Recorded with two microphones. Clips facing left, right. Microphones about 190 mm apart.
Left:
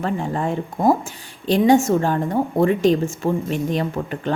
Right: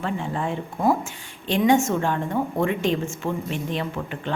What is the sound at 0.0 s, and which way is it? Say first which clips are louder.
A woman's voice: left 4 dB; 40° left (ahead or behind).